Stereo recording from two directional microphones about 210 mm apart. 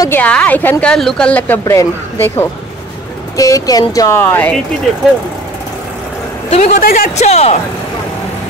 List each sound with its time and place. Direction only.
0.0 s a woman's voice: 10° left (ahead or behind)
6.5 s a woman's voice: 35° left (ahead or behind)
7.2 s speech: 30° left (ahead or behind)